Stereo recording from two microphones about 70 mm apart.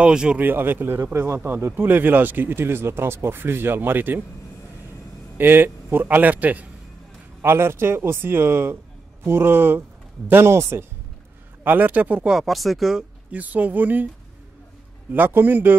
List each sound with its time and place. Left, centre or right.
0.0 s speech: centre
0.4 s a man's voice: right
5.4 s a man's voice: right
7.4 s speech: right
11.6 s a man's voice: right
12.3 s speech: centre
13.3 s a man's voice: right
15.1 s a man's voice: right